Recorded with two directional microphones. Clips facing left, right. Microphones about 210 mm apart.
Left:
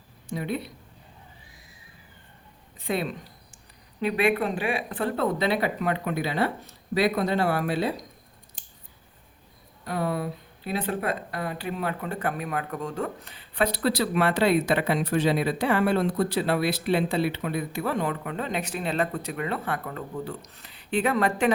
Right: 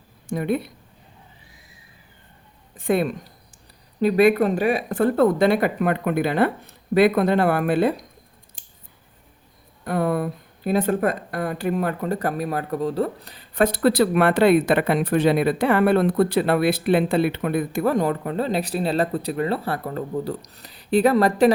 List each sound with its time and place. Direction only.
0.3 s a woman's voice: 50° right (ahead or behind)
2.7 s a woman's voice: 50° right (ahead or behind)
4.0 s a woman's voice: 40° right (ahead or behind)
9.8 s a woman's voice: 55° right (ahead or behind); by 21.5 s 35° right (ahead or behind)